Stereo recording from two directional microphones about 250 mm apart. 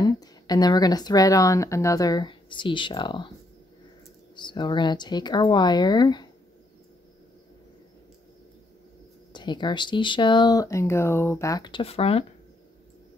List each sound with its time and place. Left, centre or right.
0.0 s speech: centre
4.4 s speech: centre
9.3 s speech: centre